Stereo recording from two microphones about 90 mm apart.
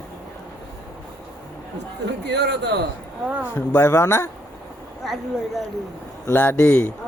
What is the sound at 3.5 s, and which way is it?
Speech, 25° left (ahead or behind).